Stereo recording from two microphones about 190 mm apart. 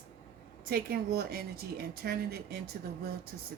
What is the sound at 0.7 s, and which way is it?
Speech, 55° right (ahead or behind).